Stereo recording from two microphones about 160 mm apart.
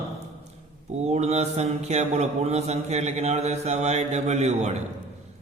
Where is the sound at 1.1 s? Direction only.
40° right (ahead or behind).